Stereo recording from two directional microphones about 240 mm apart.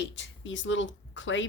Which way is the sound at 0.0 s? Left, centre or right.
Left.